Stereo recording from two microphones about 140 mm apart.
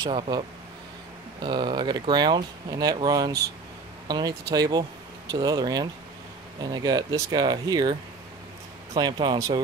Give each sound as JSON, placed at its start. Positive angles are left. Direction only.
{"t": 0.0, "sound": "speech", "side_deg": -35}
{"t": 8.9, "sound": "speech", "side_deg": -30}